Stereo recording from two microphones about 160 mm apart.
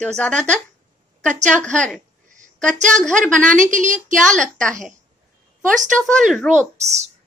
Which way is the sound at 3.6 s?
50° right (ahead or behind).